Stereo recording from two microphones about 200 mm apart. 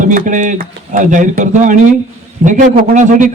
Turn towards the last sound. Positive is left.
turn(degrees=-40)  # may be behind; listen again after turning